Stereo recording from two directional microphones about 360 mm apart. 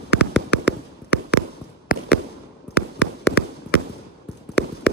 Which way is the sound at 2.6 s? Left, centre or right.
Left.